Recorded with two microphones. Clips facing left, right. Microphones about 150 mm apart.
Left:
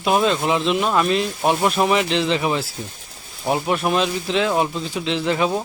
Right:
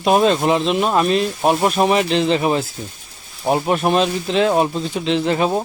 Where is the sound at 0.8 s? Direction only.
30° right (ahead or behind).